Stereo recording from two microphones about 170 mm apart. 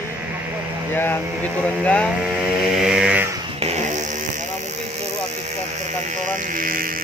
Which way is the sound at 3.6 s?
45° right (ahead or behind).